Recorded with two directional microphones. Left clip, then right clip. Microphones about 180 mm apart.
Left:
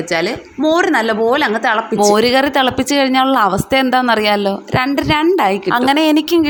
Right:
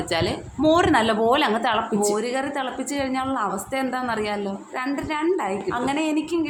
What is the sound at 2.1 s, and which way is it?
A woman's voice, 50° left (ahead or behind).